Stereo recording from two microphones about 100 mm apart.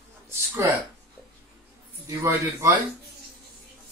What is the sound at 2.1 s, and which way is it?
Speech, 30° right (ahead or behind).